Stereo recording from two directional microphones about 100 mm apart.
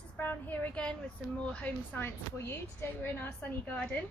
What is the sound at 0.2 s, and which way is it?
A woman's voice, 20° left (ahead or behind).